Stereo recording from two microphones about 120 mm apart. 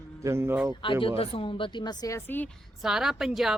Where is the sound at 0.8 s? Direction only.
45° left (ahead or behind); by 2.5 s 15° left (ahead or behind).